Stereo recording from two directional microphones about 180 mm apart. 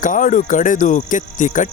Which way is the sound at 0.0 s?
45° left (ahead or behind).